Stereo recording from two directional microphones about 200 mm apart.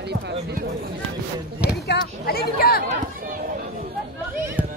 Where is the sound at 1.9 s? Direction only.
50° left (ahead or behind).